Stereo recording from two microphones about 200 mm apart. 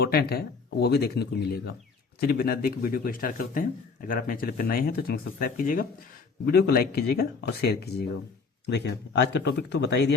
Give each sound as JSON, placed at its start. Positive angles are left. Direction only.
{"t": 0.0, "sound": "speech", "side_deg": 50}